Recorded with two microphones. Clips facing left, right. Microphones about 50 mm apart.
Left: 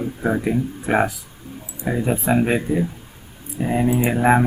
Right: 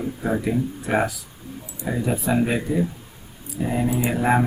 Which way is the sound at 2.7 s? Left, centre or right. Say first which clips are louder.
Left 2 dB; centre.